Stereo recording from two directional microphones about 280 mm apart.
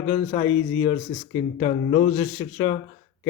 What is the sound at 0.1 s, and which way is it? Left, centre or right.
Speech, centre.